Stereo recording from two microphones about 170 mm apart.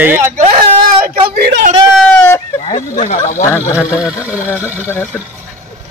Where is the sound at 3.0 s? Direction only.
50° left (ahead or behind).